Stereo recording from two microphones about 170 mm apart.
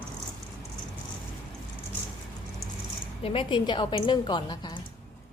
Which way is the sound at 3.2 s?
30° left (ahead or behind).